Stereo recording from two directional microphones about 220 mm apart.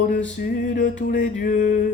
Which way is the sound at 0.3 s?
40° left (ahead or behind).